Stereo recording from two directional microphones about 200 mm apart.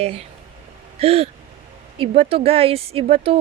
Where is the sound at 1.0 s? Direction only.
30° right (ahead or behind).